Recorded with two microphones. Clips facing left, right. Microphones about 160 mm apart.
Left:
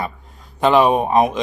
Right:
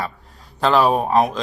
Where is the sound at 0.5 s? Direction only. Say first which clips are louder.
Left 3 dB; centre (ahead or behind).